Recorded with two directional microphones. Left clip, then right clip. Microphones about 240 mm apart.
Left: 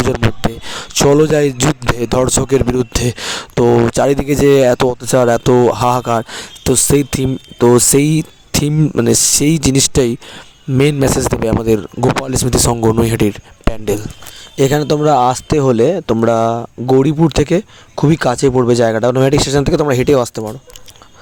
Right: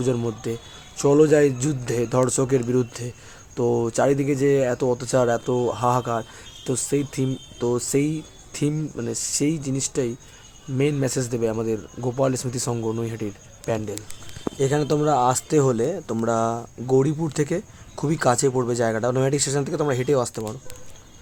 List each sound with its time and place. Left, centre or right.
0.7 s speech: left